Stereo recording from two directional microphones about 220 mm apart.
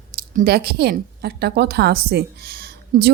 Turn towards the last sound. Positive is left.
turn(degrees=-45)  # may be behind; listen again after turning